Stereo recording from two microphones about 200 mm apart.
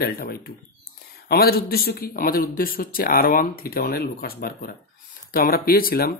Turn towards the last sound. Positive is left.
turn(degrees=45)  # may be behind; listen again after turning